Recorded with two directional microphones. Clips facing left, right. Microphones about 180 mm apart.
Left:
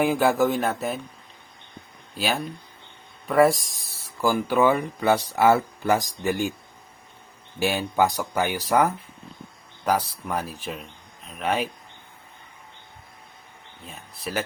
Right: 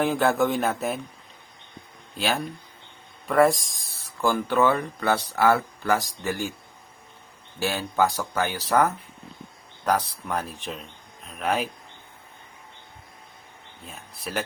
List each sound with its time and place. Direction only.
0.0 s speech: 10° left (ahead or behind)
2.1 s speech: 5° left (ahead or behind)
7.6 s speech: 15° left (ahead or behind); by 11.7 s centre (ahead or behind)
13.8 s speech: centre (ahead or behind)